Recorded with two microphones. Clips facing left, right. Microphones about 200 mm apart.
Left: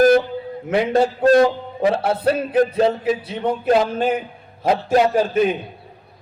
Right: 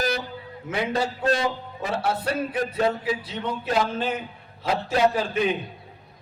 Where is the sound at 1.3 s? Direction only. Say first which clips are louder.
Left 13 dB; 55° left (ahead or behind).